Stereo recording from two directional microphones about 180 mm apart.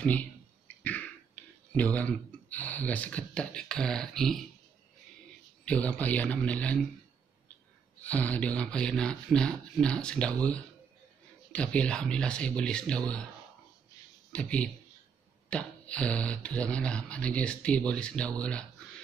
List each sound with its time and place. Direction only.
0.0 s speech: 10° left (ahead or behind)
5.7 s speech: 5° left (ahead or behind)
8.0 s speech: 10° left (ahead or behind)
14.3 s speech: 5° left (ahead or behind)